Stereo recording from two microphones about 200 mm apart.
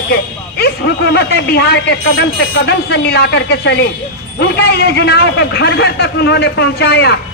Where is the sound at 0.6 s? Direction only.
55° left (ahead or behind).